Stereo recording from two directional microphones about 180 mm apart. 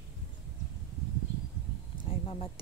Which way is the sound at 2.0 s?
30° left (ahead or behind).